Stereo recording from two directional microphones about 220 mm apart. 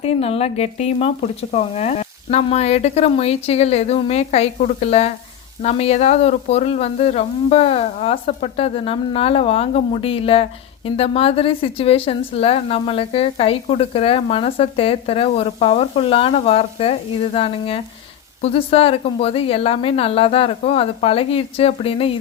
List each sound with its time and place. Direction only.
0.0 s a woman's voice: 25° left (ahead or behind)